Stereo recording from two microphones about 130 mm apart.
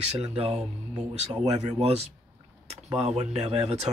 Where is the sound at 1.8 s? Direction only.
55° right (ahead or behind).